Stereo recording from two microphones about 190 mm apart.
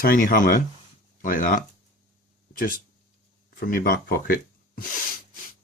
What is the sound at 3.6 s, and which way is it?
Speech, 50° left (ahead or behind).